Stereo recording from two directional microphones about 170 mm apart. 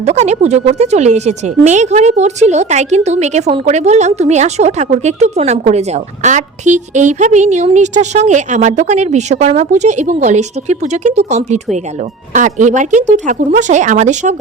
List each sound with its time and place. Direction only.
0.0 s speech: 40° right (ahead or behind)